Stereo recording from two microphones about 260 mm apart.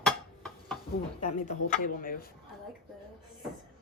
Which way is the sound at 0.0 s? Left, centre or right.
Centre.